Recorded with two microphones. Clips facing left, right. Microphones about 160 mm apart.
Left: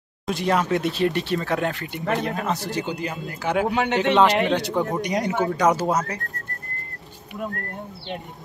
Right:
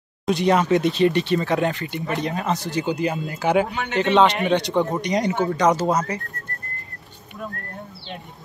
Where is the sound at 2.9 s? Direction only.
20° right (ahead or behind).